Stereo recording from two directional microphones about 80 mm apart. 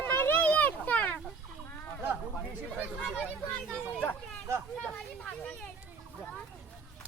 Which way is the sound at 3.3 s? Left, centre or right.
Centre.